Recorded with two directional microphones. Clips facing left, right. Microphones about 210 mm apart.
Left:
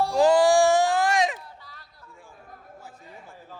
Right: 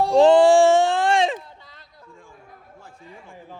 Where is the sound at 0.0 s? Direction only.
25° right (ahead or behind).